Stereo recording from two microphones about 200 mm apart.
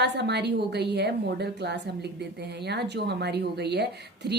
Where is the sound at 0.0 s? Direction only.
55° right (ahead or behind).